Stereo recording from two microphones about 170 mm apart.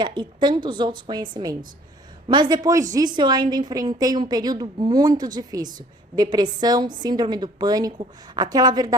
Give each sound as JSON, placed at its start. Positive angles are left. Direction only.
{"t": 0.0, "sound": "a woman's voice", "side_deg": -25}